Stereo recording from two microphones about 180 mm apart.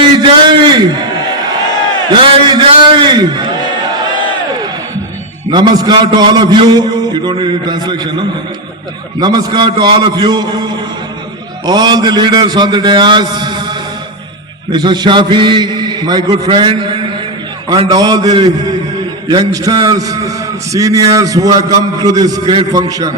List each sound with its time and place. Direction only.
0.0 s a man's voice: 25° right (ahead or behind)
2.2 s a man's voice: 30° right (ahead or behind)
5.5 s a man's voice: 25° right (ahead or behind)
9.2 s a man's voice: 20° right (ahead or behind)
11.6 s a man's voice: 25° right (ahead or behind)